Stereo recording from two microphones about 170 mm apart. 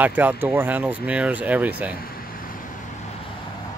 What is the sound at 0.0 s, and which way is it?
Speech, 10° right (ahead or behind).